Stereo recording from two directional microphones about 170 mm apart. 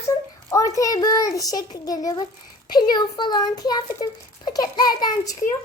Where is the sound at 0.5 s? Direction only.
20° left (ahead or behind).